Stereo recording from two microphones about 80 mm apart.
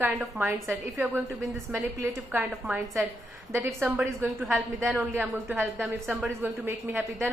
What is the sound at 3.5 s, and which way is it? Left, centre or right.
Speech, right.